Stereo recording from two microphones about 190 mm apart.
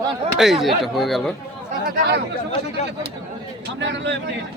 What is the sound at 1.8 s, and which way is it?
Speech, 45° right (ahead or behind).